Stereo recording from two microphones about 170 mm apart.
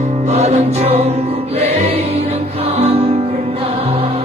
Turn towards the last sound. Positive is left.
turn(degrees=-35)  # may be behind; listen again after turning